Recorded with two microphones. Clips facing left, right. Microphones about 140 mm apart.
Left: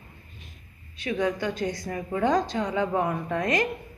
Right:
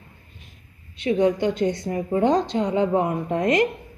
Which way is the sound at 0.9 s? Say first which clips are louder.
Right 7 dB; 25° right (ahead or behind).